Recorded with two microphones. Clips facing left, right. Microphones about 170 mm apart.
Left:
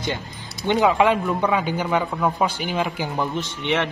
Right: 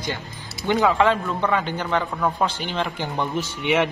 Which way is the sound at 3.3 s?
10° right (ahead or behind).